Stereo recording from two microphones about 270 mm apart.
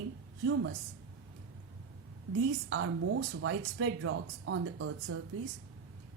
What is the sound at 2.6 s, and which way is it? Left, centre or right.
Speech, right.